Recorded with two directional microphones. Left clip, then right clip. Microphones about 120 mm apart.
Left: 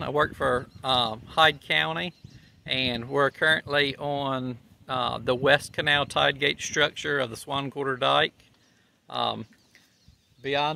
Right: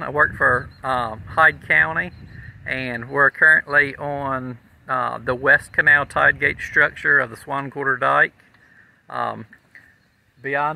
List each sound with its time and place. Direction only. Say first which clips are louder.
0.0 s speech: right 7 dB; 20° left (ahead or behind)